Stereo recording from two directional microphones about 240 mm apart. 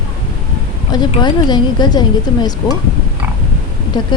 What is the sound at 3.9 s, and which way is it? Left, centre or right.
Speech, centre.